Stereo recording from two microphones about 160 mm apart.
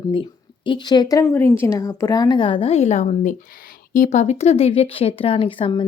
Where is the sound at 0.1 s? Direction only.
30° left (ahead or behind).